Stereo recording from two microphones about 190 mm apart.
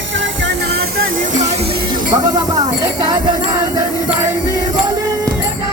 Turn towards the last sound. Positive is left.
turn(degrees=-20)  # may be behind; listen again after turning